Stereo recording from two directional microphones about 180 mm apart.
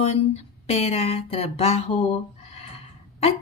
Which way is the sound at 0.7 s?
35° left (ahead or behind).